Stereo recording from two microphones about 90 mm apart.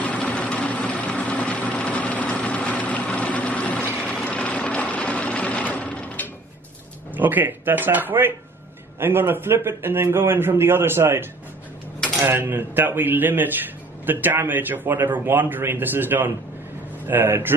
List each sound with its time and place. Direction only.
0.0 s vehicle: 15° left (ahead or behind)
7.2 s a man's voice: 20° right (ahead or behind)
12.3 s a man's voice: 25° right (ahead or behind)